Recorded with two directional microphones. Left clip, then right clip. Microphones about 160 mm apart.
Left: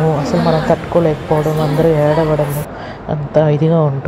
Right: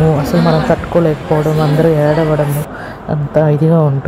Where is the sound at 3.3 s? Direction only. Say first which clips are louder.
Right 1 dB; 10° right (ahead or behind).